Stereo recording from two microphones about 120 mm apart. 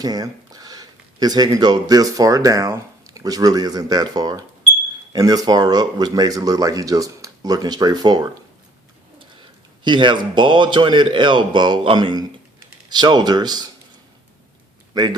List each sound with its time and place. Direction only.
0.0 s speech: 30° right (ahead or behind)
14.9 s speech: 35° right (ahead or behind)